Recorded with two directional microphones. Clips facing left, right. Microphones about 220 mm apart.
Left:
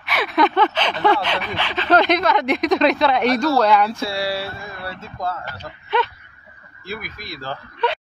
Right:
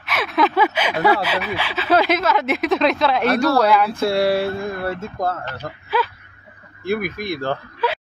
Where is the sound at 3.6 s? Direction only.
5° right (ahead or behind).